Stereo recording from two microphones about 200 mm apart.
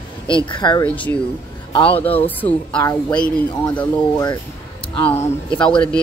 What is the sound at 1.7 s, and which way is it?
Speech, 25° left (ahead or behind).